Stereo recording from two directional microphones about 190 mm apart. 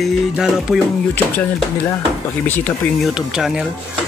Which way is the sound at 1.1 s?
10° left (ahead or behind).